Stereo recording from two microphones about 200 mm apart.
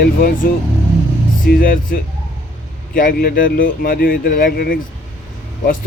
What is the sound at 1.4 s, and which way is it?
Speech, 45° left (ahead or behind).